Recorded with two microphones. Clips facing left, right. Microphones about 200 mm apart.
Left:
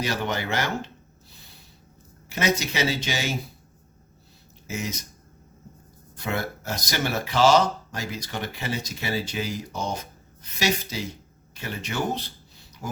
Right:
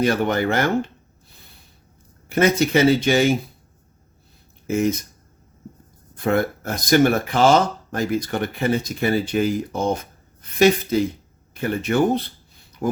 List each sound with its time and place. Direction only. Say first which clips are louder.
0.0 s speech: right 8 dB; 55° right (ahead or behind)
2.3 s speech: right 9 dB; 55° right (ahead or behind)
4.6 s speech: right 12 dB; 55° right (ahead or behind)
6.2 s speech: right 9 dB; 55° right (ahead or behind)